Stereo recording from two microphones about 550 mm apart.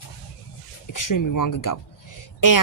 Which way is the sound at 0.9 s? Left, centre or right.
Left.